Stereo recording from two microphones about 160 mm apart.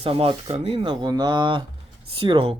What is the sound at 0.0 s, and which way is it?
Speech, 35° right (ahead or behind).